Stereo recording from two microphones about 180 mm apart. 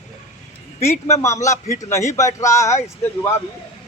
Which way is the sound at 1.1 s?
15° left (ahead or behind).